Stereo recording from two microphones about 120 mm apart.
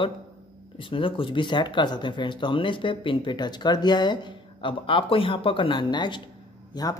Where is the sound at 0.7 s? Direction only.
45° left (ahead or behind).